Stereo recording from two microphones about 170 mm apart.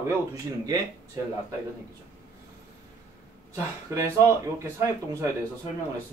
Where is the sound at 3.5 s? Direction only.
15° right (ahead or behind).